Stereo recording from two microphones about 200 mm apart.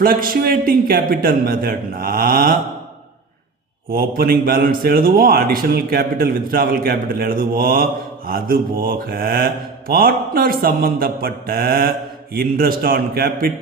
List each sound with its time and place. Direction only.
0.0 s speech: 45° right (ahead or behind)
3.9 s speech: 45° right (ahead or behind)